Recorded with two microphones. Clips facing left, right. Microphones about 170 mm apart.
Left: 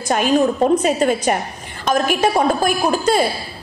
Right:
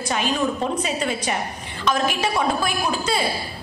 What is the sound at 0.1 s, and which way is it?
A woman's voice, 50° left (ahead or behind).